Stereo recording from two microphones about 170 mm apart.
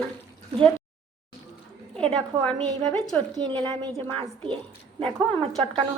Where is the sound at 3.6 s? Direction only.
10° left (ahead or behind).